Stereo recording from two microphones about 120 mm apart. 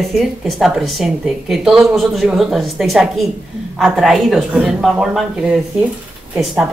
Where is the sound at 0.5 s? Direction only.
Centre (ahead or behind).